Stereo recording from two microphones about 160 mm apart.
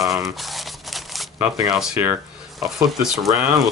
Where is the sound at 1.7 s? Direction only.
5° right (ahead or behind).